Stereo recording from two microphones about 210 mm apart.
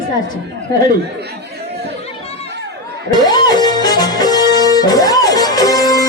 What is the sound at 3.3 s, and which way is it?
Music, 20° left (ahead or behind).